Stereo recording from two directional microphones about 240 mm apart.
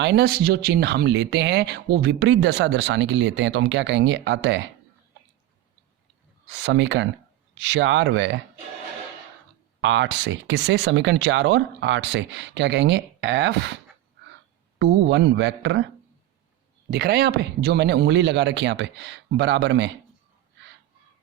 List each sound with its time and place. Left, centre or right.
0.0 s speech: right
6.5 s speech: right
9.8 s speech: right
14.8 s speech: right
16.9 s speech: right